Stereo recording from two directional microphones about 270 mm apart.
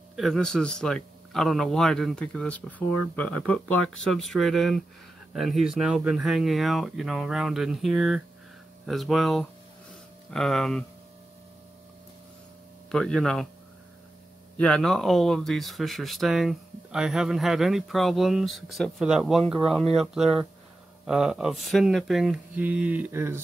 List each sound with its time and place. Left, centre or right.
0.1 s speech: centre
12.9 s speech: centre
14.6 s speech: centre